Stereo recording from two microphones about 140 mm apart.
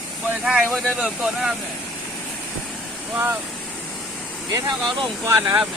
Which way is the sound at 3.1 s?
15° right (ahead or behind).